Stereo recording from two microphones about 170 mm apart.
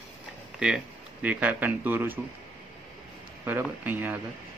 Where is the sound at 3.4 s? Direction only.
10° right (ahead or behind).